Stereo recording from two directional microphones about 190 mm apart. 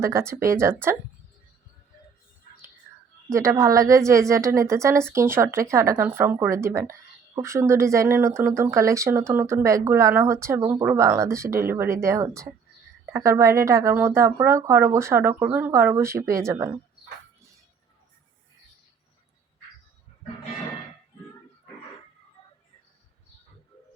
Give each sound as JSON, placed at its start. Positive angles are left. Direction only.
{"t": 0.0, "sound": "speech", "side_deg": -15}
{"t": 3.2, "sound": "speech", "side_deg": -15}